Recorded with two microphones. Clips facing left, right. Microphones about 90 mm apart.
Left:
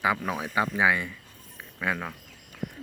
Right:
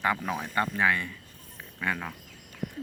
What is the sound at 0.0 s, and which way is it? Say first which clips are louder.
Speech: left 2 dB; 5° left (ahead or behind).